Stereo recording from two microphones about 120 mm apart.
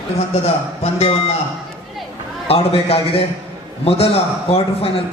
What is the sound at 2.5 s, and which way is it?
A man's voice, 55° left (ahead or behind).